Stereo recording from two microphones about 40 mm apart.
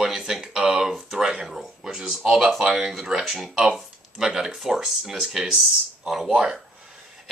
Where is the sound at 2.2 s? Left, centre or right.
Centre.